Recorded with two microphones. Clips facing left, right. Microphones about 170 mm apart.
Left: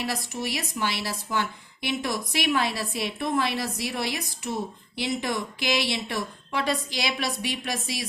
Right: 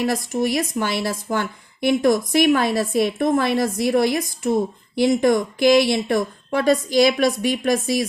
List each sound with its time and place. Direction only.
0.0 s a woman's voice: 50° right (ahead or behind)